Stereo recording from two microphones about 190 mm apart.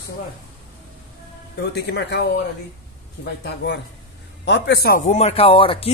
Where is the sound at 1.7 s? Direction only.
60° left (ahead or behind).